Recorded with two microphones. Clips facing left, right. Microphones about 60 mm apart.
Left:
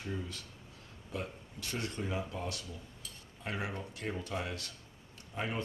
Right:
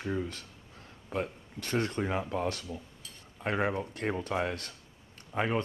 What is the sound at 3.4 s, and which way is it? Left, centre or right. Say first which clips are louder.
Speech: right 9 dB; right.